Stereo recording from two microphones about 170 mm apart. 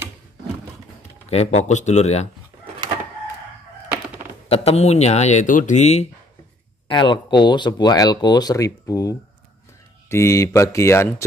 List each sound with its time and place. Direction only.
1.3 s speech: 45° left (ahead or behind)
4.5 s speech: 40° left (ahead or behind)
6.9 s speech: 25° left (ahead or behind)